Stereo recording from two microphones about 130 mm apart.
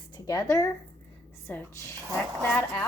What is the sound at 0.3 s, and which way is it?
Speech, 25° left (ahead or behind).